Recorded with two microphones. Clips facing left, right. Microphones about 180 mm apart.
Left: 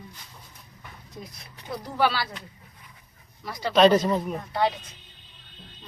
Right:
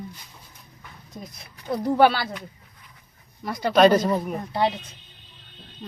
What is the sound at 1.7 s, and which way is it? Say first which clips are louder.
Speech: right 7 dB; 55° right (ahead or behind).